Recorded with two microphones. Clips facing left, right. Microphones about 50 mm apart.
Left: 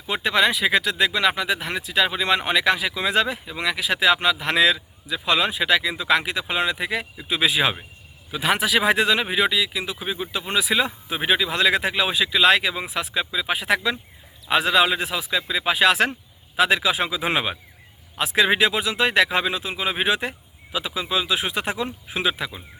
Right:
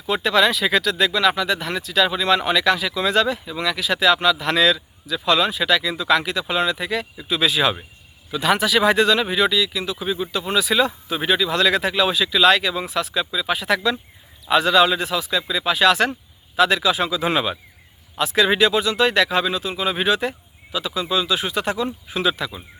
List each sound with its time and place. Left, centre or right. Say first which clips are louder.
0.1 s speech: right 2 dB; centre